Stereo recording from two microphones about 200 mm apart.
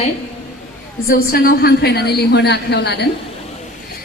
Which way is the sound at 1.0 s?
50° left (ahead or behind).